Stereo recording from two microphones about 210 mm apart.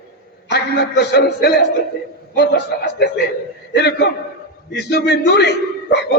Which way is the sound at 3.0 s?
50° left (ahead or behind).